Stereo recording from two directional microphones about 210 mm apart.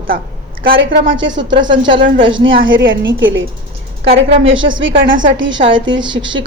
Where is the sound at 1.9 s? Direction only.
40° right (ahead or behind).